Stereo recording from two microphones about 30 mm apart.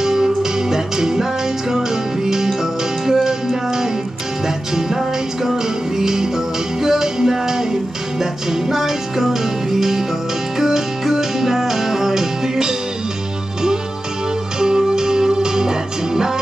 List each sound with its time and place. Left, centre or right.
0.0 s music: centre
4.7 s music: centre
14.6 s music: right